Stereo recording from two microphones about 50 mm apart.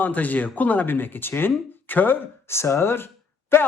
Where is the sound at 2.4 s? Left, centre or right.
Left.